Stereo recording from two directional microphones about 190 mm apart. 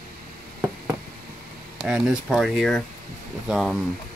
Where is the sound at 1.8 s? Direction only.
5° right (ahead or behind).